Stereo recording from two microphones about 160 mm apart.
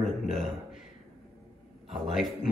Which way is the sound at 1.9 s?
Centre (ahead or behind).